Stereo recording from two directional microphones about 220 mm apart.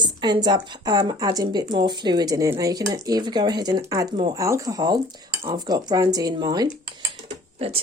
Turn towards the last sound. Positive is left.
turn(degrees=-25)  # may be behind; listen again after turning